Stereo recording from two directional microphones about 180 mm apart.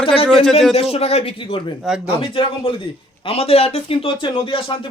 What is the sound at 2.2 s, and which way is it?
A man's voice, 30° left (ahead or behind).